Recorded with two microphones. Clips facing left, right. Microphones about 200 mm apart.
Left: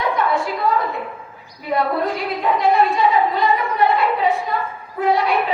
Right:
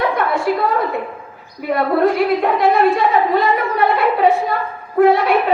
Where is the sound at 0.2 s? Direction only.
55° right (ahead or behind).